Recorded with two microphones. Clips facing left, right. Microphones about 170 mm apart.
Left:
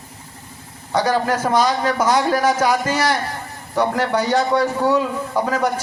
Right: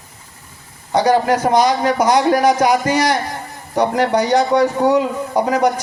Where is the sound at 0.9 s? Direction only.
15° right (ahead or behind).